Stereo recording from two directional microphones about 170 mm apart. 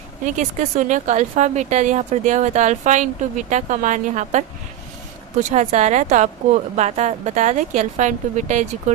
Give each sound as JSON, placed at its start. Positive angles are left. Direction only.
{"t": 0.3, "sound": "speech", "side_deg": -45}